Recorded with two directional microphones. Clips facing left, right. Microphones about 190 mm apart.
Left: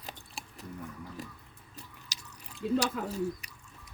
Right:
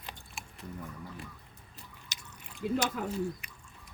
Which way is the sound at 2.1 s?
35° left (ahead or behind).